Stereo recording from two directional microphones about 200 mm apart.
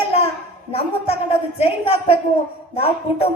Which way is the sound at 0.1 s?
30° left (ahead or behind).